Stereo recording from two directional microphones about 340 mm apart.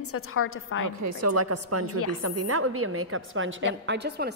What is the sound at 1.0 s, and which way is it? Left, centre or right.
A woman's voice, right.